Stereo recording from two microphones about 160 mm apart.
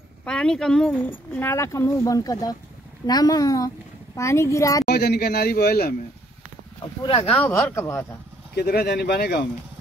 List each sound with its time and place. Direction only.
0.2 s a woman's voice: 5° left (ahead or behind)
1.3 s speech: 15° left (ahead or behind)
4.8 s speech: 85° left
7.1 s speech: 35° left (ahead or behind)
7.3 s speech: 15° left (ahead or behind)
8.5 s speech: 80° left